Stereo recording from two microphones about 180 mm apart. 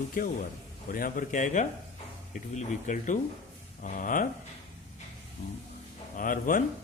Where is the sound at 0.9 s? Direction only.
50° left (ahead or behind).